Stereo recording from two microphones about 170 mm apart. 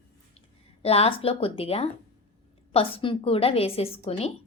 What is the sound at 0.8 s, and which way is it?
A woman's voice, 35° left (ahead or behind).